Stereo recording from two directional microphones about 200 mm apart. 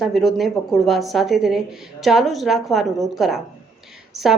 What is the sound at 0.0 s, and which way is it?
A woman's voice, centre (ahead or behind).